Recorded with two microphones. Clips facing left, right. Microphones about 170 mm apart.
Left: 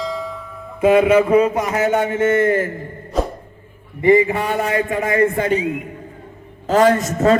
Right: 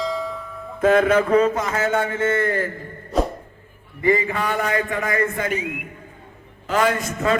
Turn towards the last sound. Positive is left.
turn(degrees=40)  # may be behind; listen again after turning